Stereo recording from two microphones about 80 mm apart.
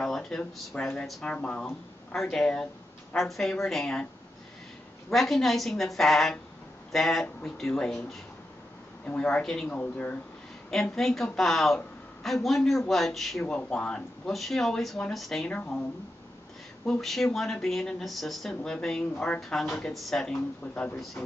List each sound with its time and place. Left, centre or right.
0.0 s a woman's voice: centre
3.2 s speech: centre
5.1 s speech: centre
10.7 s speech: centre
13.5 s speech: centre
15.4 s speech: centre
16.8 s speech: centre
20.6 s speech: left